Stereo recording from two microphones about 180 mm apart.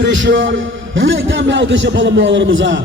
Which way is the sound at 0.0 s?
85° right.